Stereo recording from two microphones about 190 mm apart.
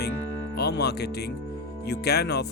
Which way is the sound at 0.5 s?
60° left (ahead or behind).